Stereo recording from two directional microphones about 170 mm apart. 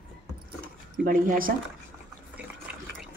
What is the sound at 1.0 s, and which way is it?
Speech, 55° right (ahead or behind).